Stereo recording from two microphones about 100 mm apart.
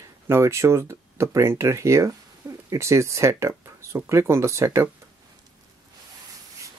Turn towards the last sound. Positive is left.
turn(degrees=-30)  # may be behind; listen again after turning